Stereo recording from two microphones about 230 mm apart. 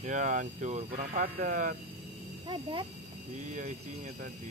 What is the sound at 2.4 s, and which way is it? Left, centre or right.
Speech, right.